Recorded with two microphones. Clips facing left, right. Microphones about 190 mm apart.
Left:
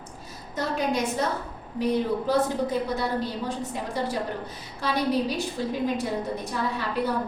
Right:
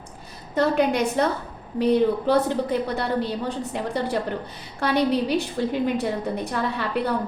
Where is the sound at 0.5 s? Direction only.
65° right (ahead or behind).